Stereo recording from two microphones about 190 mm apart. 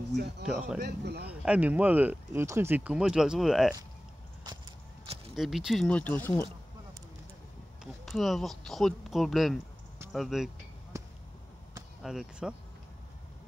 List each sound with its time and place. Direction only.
0.5 s speech: 5° right (ahead or behind)
0.7 s speech: 60° right (ahead or behind)
1.4 s speech: 5° right (ahead or behind)
5.3 s speech: centre (ahead or behind)
7.8 s speech: centre (ahead or behind)
10.9 s basketball bounce: 15° right (ahead or behind)
12.0 s speech: centre (ahead or behind)